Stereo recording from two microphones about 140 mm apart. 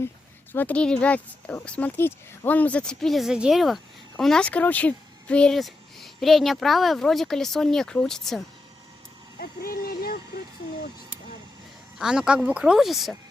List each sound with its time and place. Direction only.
0.5 s speech: 10° left (ahead or behind)
9.4 s speech: 90° left
11.9 s speech: 5° right (ahead or behind)